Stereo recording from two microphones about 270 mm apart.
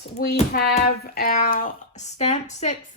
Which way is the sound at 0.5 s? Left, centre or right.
Left.